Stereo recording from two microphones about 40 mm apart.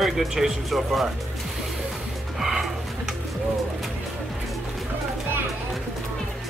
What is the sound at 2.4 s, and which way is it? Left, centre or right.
Music, centre.